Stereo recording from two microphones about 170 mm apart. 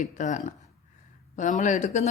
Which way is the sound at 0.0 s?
45° left (ahead or behind).